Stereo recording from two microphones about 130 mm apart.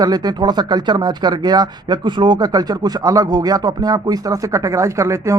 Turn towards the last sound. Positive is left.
turn(degrees=-25)  # may be behind; listen again after turning